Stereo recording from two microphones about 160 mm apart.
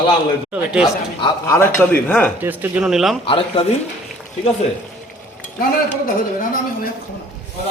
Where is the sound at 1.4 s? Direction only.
15° left (ahead or behind).